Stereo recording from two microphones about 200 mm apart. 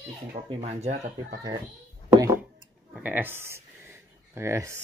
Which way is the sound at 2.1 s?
15° right (ahead or behind).